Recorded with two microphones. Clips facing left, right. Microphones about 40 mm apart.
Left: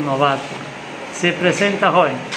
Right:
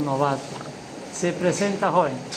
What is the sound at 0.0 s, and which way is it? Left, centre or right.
Speech, left.